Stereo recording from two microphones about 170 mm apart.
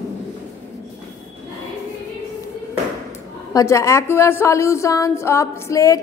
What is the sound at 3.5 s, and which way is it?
A woman's voice, 15° left (ahead or behind).